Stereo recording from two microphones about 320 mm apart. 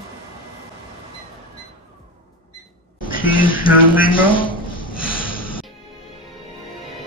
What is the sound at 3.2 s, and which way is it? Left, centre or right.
Speech, left.